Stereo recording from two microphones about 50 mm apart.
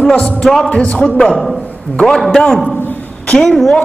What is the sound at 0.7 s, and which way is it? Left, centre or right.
A woman's voice, left.